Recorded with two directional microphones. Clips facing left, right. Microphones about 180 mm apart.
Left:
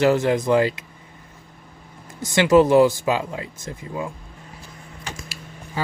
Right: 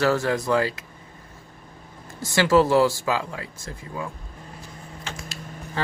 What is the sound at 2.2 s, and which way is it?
Speech, 20° left (ahead or behind).